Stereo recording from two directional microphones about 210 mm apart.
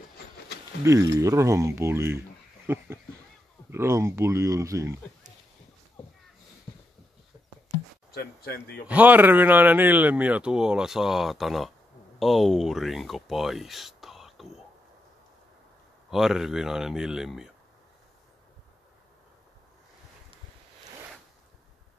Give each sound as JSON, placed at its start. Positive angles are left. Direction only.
{"t": 0.8, "sound": "speech", "side_deg": -15}
{"t": 8.1, "sound": "speech", "side_deg": 50}
{"t": 8.8, "sound": "speech", "side_deg": -5}
{"t": 16.1, "sound": "speech", "side_deg": 0}